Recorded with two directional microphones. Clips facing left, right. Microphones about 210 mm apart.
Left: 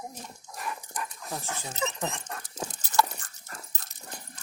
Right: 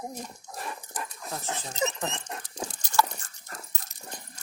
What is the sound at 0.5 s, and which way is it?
Dog, 30° right (ahead or behind).